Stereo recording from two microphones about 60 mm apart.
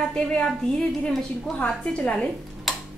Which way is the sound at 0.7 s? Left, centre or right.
Centre.